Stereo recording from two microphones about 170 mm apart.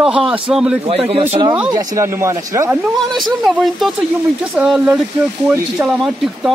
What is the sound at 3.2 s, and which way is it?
Speech, centre (ahead or behind).